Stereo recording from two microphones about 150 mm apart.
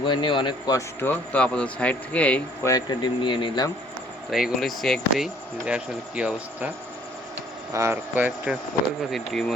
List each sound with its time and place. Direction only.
0.0 s a man's voice: 30° left (ahead or behind); by 2.4 s 10° left (ahead or behind)
2.6 s a man's voice: 25° left (ahead or behind)
4.3 s speech: centre (ahead or behind)
7.7 s speech: 20° right (ahead or behind)
9.0 s speech: centre (ahead or behind)